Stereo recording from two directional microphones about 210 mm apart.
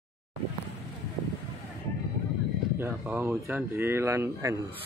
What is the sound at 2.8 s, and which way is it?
Speech, 10° right (ahead or behind).